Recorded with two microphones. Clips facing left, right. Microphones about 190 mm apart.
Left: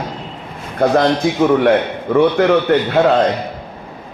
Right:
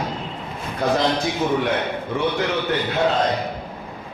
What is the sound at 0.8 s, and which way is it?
A man's voice, 55° left (ahead or behind).